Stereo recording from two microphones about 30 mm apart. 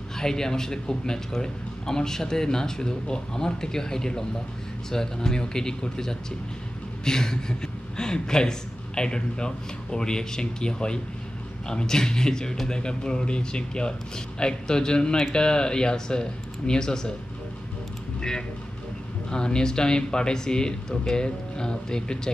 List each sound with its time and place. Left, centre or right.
0.2 s speech: centre
19.3 s speech: left